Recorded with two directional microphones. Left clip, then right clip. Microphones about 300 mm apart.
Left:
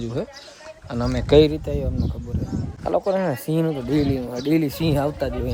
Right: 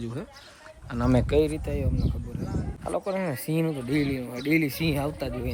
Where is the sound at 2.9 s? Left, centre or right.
Centre.